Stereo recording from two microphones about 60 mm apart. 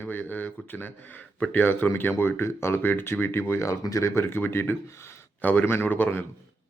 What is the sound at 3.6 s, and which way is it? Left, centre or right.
Speech, left.